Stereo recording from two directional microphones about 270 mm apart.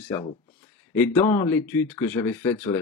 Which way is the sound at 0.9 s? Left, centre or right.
Centre.